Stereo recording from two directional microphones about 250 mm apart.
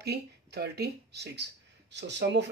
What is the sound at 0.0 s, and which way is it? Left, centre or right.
Speech, right.